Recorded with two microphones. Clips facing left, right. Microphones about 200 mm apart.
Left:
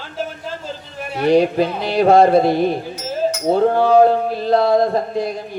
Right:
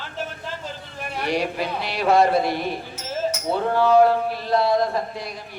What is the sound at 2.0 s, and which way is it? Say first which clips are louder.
Speech: left 6 dB; 50° left (ahead or behind).